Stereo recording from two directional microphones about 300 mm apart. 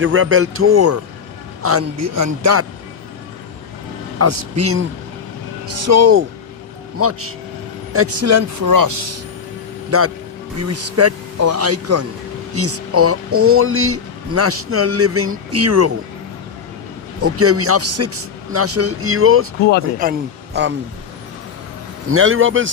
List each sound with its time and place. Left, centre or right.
0.0 s speech: right
4.2 s speech: right
10.6 s speech: right
17.2 s speech: right
20.0 s speech: right
22.1 s a man's voice: right